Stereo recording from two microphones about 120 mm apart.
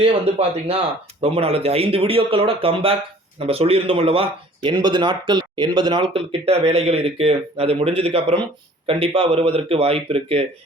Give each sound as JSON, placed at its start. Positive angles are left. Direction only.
{"t": 0.0, "sound": "speech", "side_deg": -55}